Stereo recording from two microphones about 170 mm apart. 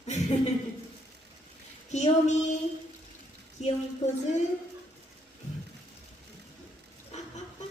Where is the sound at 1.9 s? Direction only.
45° left (ahead or behind).